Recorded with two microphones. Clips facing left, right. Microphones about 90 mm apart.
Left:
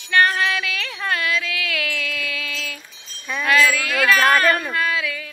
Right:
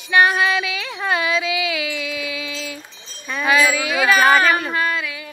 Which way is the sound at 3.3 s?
5° right (ahead or behind).